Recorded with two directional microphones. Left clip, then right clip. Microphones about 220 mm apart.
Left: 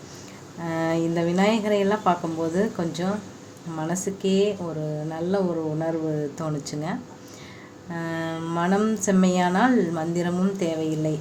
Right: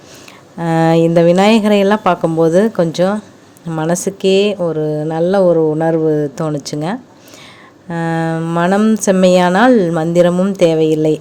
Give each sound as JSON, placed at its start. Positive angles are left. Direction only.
{"t": 0.6, "sound": "speech", "side_deg": -45}